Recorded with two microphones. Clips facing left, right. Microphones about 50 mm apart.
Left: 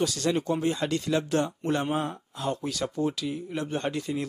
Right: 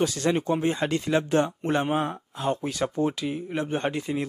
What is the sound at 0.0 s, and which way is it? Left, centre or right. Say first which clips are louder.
Speech: right 2 dB; right.